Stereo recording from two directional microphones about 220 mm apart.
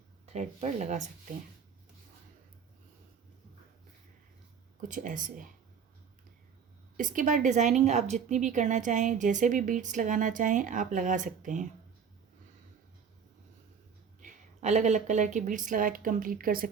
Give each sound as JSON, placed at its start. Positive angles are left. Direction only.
{"t": 0.3, "sound": "a woman's voice", "side_deg": -30}
{"t": 4.9, "sound": "a woman's voice", "side_deg": -35}
{"t": 6.9, "sound": "a woman's voice", "side_deg": -35}
{"t": 14.2, "sound": "a woman's voice", "side_deg": -35}